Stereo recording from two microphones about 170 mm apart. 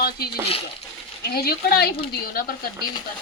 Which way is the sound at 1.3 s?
65° left (ahead or behind).